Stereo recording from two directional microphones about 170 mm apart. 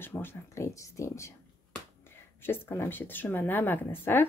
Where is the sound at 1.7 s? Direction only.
15° left (ahead or behind).